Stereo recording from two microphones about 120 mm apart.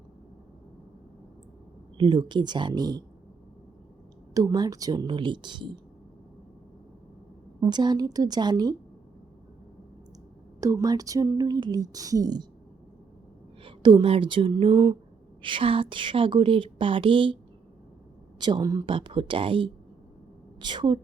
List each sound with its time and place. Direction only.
2.0 s speech: 40° right (ahead or behind)
4.4 s speech: 30° right (ahead or behind)
7.6 s speech: 40° right (ahead or behind)
10.6 s speech: 25° right (ahead or behind)
13.7 s speech: 40° right (ahead or behind)
18.3 s speech: 40° right (ahead or behind)
18.9 s a woman's voice: 45° right (ahead or behind)